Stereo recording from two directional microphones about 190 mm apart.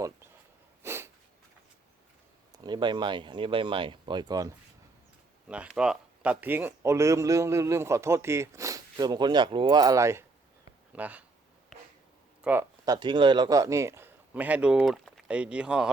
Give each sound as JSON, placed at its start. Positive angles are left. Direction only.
{"t": 0.8, "sound": "a sound", "side_deg": -15}
{"t": 2.5, "sound": "speech", "side_deg": -25}
{"t": 5.5, "sound": "speech", "side_deg": -5}
{"t": 12.4, "sound": "speech", "side_deg": -10}